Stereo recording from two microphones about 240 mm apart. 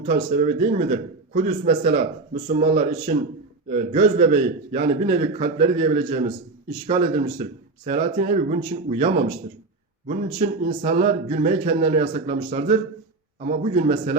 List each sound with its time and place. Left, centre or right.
0.0 s a man's voice: right